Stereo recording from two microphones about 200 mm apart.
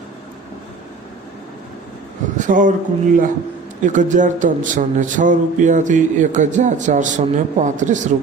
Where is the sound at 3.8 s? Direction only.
40° right (ahead or behind).